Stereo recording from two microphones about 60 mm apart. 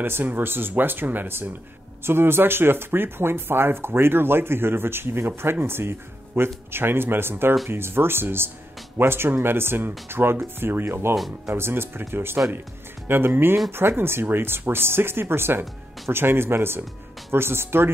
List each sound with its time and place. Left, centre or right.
0.0 s speech: right